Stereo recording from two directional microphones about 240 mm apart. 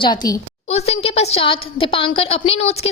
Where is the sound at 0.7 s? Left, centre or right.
Left.